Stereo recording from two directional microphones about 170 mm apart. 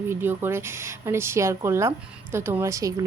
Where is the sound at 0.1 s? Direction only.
15° right (ahead or behind).